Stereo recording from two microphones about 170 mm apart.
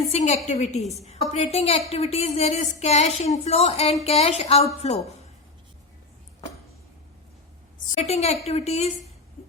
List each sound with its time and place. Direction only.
0.1 s speech: 40° left (ahead or behind)
7.9 s speech: 40° left (ahead or behind)